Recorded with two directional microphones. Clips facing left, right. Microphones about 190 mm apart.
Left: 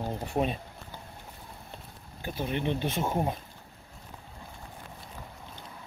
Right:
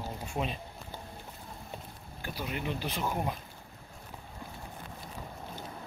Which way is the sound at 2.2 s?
25° left (ahead or behind).